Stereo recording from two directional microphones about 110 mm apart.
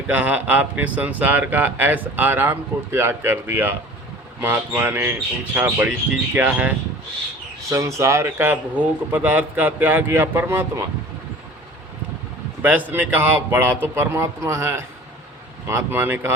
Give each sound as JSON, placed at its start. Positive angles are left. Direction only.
{"t": 0.1, "sound": "speech", "side_deg": -15}
{"t": 7.7, "sound": "speech", "side_deg": -30}
{"t": 12.6, "sound": "speech", "side_deg": -15}